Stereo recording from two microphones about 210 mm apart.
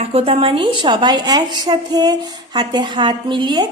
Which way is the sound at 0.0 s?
30° right (ahead or behind).